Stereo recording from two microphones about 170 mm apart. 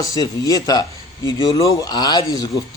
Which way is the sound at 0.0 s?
20° left (ahead or behind).